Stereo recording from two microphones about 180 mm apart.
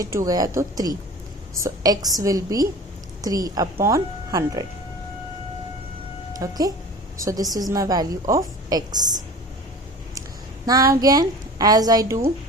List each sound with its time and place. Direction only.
0.0 s a woman's voice: 15° right (ahead or behind)
6.4 s a woman's voice: 20° right (ahead or behind)
10.7 s a woman's voice: 20° right (ahead or behind)